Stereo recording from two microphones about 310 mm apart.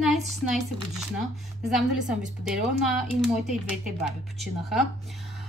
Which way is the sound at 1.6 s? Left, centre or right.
Centre.